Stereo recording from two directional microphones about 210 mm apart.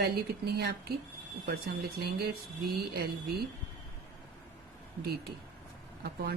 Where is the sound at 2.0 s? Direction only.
50° right (ahead or behind).